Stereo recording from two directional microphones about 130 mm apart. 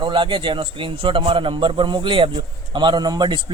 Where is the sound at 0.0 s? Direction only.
40° right (ahead or behind).